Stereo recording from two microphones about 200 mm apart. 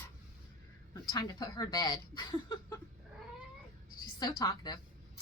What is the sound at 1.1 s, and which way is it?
Speech, 20° left (ahead or behind).